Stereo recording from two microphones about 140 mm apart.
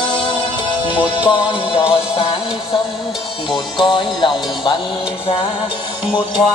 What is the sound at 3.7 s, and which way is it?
Music, 35° left (ahead or behind).